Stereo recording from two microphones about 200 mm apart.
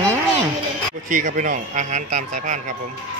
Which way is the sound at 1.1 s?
40° right (ahead or behind).